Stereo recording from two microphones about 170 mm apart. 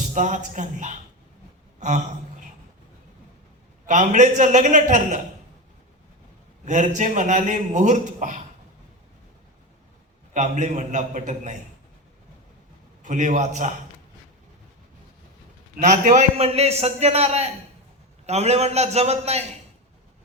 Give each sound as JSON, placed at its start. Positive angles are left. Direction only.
{"t": 0.1, "sound": "speech", "side_deg": -45}
{"t": 3.8, "sound": "speech", "side_deg": -45}
{"t": 6.7, "sound": "speech", "side_deg": -45}
{"t": 10.3, "sound": "speech", "side_deg": -45}
{"t": 13.0, "sound": "speech", "side_deg": -45}
{"t": 15.8, "sound": "a man's voice", "side_deg": -45}